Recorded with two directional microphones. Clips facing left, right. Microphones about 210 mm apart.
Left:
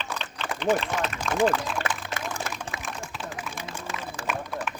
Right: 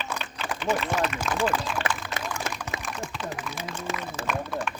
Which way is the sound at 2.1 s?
30° left (ahead or behind).